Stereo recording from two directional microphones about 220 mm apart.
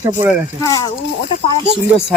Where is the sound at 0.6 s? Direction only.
15° left (ahead or behind).